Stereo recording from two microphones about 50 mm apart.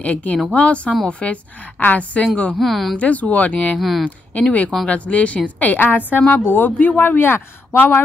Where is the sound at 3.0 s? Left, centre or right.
Left.